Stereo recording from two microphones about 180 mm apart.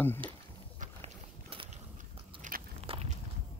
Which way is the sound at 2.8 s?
35° right (ahead or behind).